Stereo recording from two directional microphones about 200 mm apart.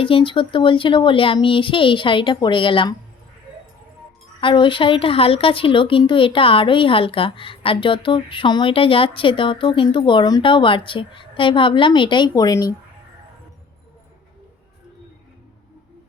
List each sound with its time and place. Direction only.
0.0 s a woman's voice: 25° left (ahead or behind)
4.4 s a woman's voice: 25° left (ahead or behind)